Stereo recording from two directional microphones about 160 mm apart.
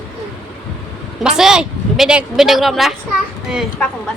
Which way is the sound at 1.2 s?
5° right (ahead or behind).